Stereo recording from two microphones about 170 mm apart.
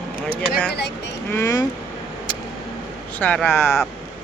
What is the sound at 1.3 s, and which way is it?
Speech, 20° left (ahead or behind).